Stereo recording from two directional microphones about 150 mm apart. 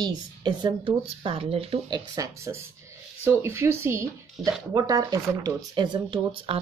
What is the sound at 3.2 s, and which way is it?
Speech, 15° right (ahead or behind).